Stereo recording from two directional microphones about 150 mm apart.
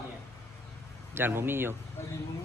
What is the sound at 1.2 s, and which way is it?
Speech, 15° right (ahead or behind).